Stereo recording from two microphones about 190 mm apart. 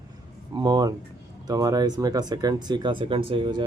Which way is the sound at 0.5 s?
20° right (ahead or behind).